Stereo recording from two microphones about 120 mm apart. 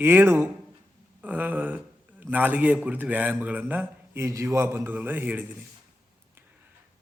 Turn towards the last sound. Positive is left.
turn(degrees=-15)  # may be behind; listen again after turning